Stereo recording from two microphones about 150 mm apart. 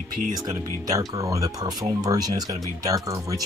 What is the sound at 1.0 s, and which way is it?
Speech, 25° right (ahead or behind).